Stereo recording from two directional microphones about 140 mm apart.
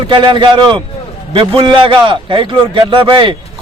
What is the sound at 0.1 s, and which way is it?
A man's voice, 35° right (ahead or behind).